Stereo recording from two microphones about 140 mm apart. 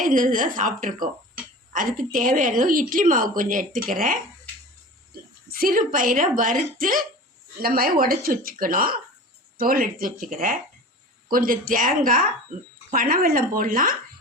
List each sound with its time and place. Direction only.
0.0 s speech: 75° right (ahead or behind)
5.5 s speech: 90° right
7.6 s speech: 90° right